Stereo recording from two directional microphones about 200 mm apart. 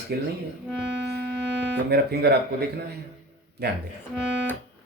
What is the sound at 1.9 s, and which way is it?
Speech, 55° right (ahead or behind).